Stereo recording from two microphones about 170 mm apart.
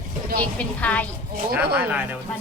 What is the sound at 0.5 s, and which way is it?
Speech, 10° left (ahead or behind).